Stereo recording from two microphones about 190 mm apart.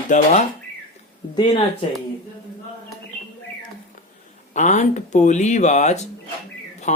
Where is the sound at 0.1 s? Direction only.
40° left (ahead or behind).